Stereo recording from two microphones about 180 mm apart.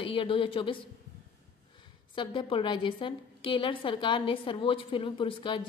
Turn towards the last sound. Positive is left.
turn(degrees=25)  # may be behind; listen again after turning